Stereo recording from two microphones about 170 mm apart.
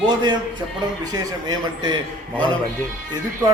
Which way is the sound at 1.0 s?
20° right (ahead or behind).